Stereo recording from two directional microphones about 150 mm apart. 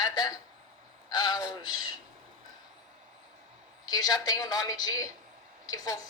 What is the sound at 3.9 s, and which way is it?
A woman's voice, 25° left (ahead or behind).